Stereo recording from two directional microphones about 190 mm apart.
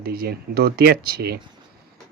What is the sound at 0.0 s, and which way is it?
Speech, 55° right (ahead or behind).